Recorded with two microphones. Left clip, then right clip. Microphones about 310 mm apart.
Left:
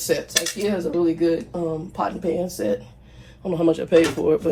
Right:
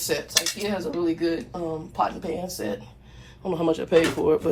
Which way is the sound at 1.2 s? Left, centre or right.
Centre.